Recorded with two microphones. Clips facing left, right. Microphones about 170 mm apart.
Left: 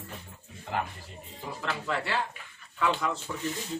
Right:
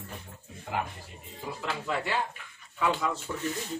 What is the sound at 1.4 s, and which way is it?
Speech, 10° right (ahead or behind).